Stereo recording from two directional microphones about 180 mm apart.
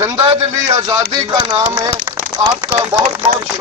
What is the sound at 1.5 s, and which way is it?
A man's voice, 15° right (ahead or behind).